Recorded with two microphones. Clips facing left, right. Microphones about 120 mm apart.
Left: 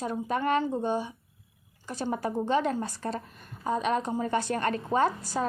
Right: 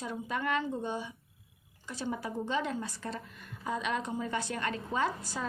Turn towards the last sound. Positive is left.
turn(degrees=45)  # may be behind; listen again after turning